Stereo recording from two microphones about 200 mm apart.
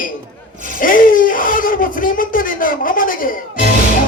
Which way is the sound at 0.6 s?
45° left (ahead or behind).